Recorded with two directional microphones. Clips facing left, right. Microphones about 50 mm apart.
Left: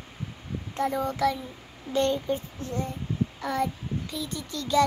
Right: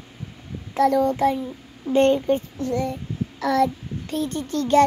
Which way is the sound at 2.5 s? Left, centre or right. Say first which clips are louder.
Right 8 dB; right.